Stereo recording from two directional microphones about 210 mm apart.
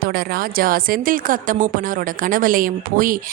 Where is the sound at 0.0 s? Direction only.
45° right (ahead or behind).